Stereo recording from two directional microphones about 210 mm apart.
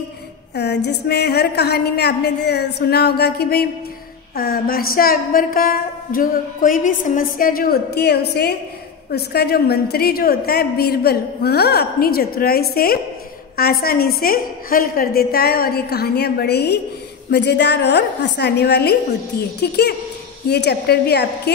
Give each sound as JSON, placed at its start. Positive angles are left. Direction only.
{"t": 0.6, "sound": "a woman's voice", "side_deg": 55}